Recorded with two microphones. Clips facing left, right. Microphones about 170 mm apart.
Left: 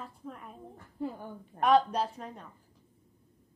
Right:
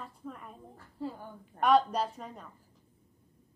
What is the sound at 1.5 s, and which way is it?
Speech, centre (ahead or behind).